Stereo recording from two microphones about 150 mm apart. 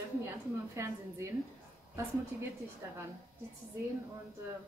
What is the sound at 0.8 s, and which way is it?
Speech, 20° right (ahead or behind).